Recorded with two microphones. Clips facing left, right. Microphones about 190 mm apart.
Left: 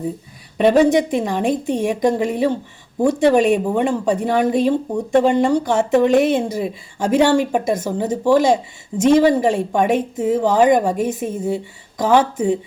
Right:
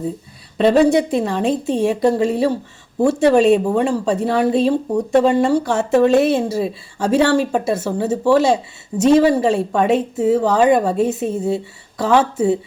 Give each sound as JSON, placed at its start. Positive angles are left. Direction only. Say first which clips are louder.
{"t": 0.6, "sound": "a woman's voice", "louder": "even", "side_deg": 15}